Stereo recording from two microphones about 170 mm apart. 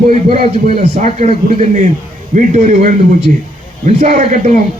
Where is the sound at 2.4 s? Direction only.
50° right (ahead or behind).